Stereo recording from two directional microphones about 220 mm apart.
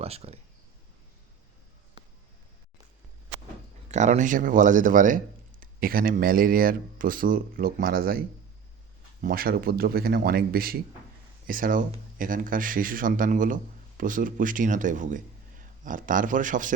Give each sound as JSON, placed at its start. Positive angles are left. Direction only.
{"t": 0.0, "sound": "speech", "side_deg": -30}
{"t": 3.9, "sound": "speech", "side_deg": -30}
{"t": 9.2, "sound": "speech", "side_deg": -40}